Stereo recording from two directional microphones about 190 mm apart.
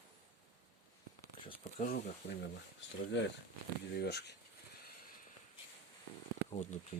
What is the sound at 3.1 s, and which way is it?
Speech, 70° left (ahead or behind).